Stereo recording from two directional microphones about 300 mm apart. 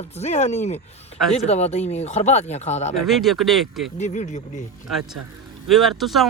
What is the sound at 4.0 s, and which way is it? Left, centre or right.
Speech, left.